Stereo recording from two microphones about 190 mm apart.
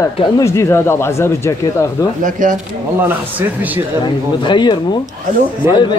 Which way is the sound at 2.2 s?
45° right (ahead or behind).